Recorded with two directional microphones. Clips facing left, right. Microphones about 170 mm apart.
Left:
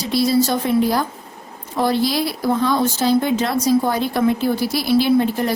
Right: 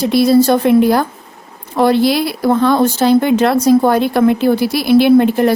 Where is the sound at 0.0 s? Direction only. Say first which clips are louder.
Right 7 dB; 60° right (ahead or behind).